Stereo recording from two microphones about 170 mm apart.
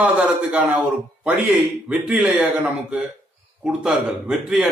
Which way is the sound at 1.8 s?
5° right (ahead or behind).